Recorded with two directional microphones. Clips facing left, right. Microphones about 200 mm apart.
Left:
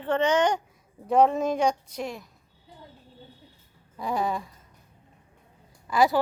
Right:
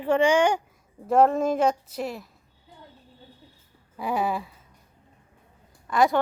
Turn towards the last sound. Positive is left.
turn(degrees=0)  # may be behind; listen again after turning